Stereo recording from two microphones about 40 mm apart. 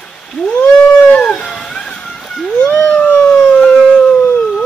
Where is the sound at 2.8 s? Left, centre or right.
Left.